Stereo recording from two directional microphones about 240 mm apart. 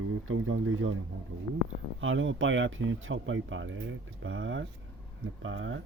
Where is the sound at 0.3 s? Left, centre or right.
Right.